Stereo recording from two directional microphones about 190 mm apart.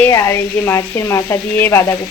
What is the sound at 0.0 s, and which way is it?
Speech, 15° left (ahead or behind).